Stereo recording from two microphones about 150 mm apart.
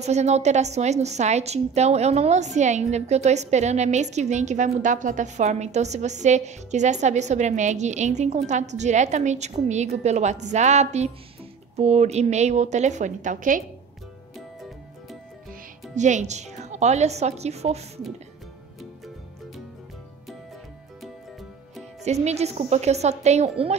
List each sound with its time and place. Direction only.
0.0 s a woman's voice: 50° right (ahead or behind)
15.9 s a woman's voice: 50° right (ahead or behind)
22.0 s a woman's voice: 45° right (ahead or behind)